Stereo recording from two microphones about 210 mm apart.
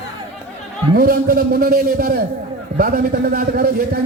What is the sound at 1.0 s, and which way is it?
A man's voice, 45° right (ahead or behind).